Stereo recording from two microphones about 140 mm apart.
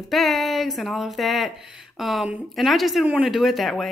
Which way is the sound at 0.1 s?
Centre (ahead or behind).